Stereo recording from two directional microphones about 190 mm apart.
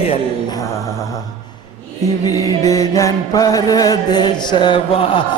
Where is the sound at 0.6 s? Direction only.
15° left (ahead or behind).